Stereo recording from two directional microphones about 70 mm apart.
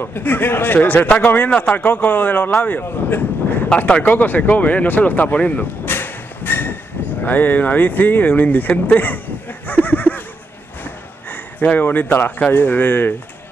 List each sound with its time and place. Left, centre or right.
0.0 s a man's voice: left
3.7 s speech: centre
10.8 s a sound: left
12.4 s a man's voice: left